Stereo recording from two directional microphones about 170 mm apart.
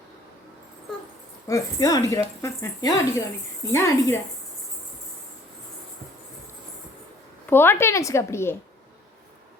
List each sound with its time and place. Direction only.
1.5 s speech: 20° left (ahead or behind)
7.4 s speech: 10° left (ahead or behind)